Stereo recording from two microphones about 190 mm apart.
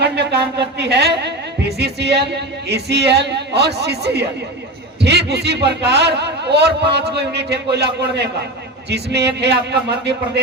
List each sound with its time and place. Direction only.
0.0 s a woman's voice: 60° right (ahead or behind)